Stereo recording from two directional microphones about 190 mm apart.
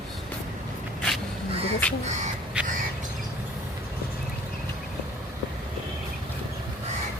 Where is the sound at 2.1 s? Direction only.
40° right (ahead or behind).